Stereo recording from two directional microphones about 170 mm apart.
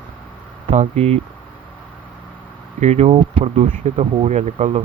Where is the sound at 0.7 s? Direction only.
40° right (ahead or behind).